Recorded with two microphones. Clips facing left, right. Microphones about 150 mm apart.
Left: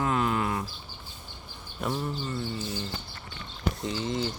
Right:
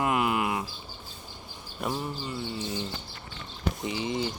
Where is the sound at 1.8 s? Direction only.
10° right (ahead or behind).